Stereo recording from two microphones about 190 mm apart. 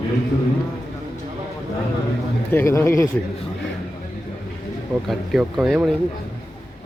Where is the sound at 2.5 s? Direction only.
10° left (ahead or behind).